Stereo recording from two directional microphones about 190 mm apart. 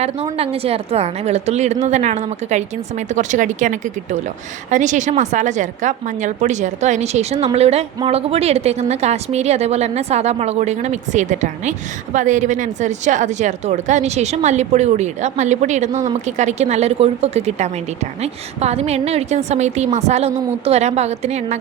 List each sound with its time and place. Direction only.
0.3 s speech: 30° right (ahead or behind)